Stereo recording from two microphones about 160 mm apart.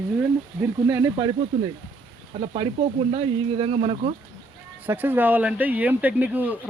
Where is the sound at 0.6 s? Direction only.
15° right (ahead or behind).